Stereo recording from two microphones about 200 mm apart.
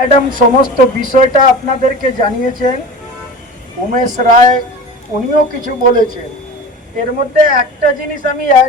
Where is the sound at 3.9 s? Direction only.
40° right (ahead or behind).